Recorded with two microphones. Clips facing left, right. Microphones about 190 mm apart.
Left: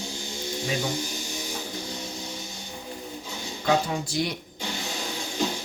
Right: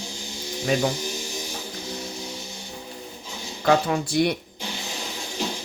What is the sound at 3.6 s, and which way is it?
Speech, 60° right (ahead or behind).